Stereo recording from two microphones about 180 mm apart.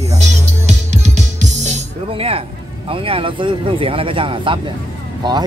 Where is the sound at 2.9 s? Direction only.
30° right (ahead or behind).